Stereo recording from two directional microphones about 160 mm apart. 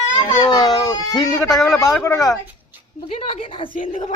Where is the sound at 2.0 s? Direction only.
20° left (ahead or behind).